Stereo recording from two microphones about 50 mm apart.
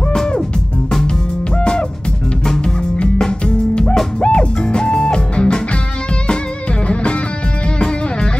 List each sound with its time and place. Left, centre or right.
0.1 s music: centre
1.6 s music: centre
6.9 s music: left